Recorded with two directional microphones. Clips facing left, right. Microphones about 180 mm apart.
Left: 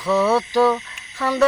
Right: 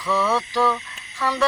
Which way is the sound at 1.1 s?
25° left (ahead or behind).